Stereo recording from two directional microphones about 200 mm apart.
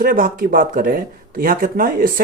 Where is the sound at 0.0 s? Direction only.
45° right (ahead or behind).